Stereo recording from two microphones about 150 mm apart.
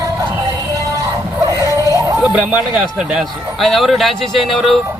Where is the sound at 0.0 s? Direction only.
20° right (ahead or behind).